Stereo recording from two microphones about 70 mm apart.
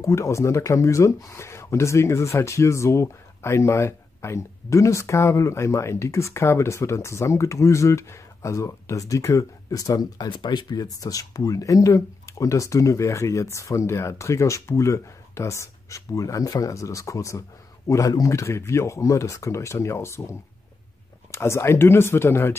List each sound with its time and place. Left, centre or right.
0.0 s speech: left